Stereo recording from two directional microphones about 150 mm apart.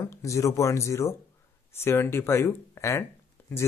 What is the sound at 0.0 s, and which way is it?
Speech, 20° left (ahead or behind).